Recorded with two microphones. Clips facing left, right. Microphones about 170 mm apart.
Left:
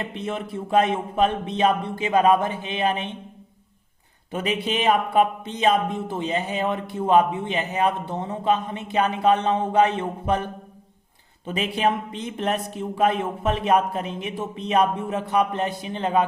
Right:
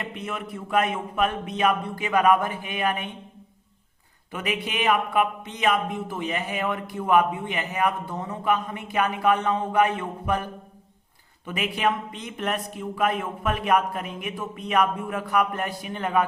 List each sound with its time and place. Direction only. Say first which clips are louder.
0.0 s speech: left 4 dB; 30° left (ahead or behind)
4.3 s speech: left 4 dB; 30° left (ahead or behind)